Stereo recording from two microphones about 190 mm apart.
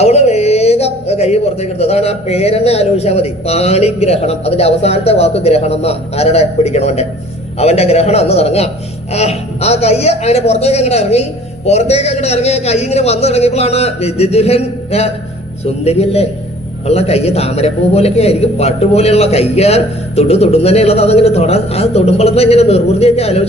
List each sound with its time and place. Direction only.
0.0 s speech: 35° left (ahead or behind)